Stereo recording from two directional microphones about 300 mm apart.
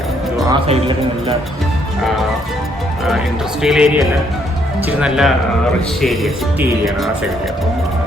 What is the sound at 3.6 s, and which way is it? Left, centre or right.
Speech, centre.